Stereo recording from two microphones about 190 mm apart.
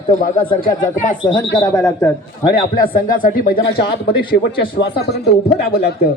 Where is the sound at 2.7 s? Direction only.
50° left (ahead or behind).